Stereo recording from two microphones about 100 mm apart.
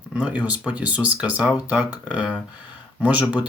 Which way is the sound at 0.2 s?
10° right (ahead or behind).